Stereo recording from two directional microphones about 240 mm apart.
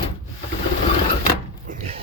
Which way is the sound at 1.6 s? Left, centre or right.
Right.